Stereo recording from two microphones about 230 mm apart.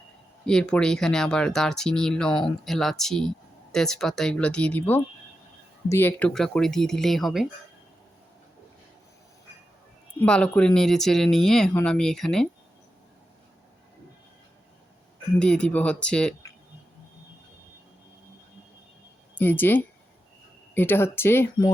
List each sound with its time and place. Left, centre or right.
0.4 s speech: centre
10.2 s speech: centre
15.4 s speech: centre
19.4 s speech: centre